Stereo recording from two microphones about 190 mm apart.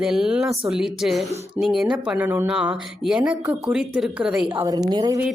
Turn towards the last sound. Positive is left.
turn(degrees=-20)  # may be behind; listen again after turning